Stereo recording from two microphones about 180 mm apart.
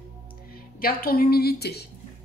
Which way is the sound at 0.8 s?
55° left (ahead or behind).